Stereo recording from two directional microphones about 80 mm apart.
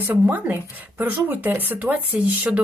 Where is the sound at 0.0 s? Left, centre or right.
Right.